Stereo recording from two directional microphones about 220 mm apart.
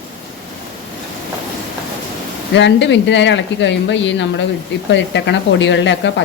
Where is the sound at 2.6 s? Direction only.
55° left (ahead or behind).